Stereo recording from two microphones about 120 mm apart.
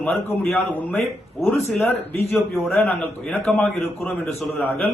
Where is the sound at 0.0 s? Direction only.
20° left (ahead or behind).